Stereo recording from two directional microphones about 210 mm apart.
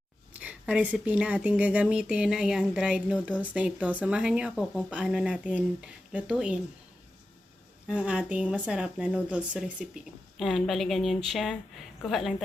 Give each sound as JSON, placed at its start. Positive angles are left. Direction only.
{"t": 0.3, "sound": "speech", "side_deg": -5}
{"t": 7.9, "sound": "speech", "side_deg": -5}